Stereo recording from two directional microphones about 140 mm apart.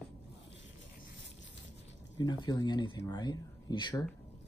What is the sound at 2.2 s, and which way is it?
Speech, 30° left (ahead or behind).